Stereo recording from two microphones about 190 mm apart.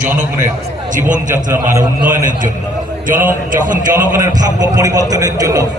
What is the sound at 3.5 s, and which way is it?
Speech, 45° right (ahead or behind).